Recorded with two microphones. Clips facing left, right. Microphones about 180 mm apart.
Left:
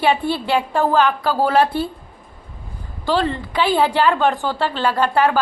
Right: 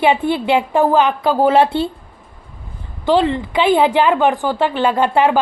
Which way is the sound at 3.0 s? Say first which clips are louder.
Right 5 dB; 20° right (ahead or behind).